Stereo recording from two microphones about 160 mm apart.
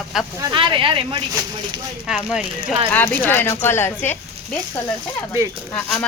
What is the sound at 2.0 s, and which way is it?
Speech, 5° right (ahead or behind).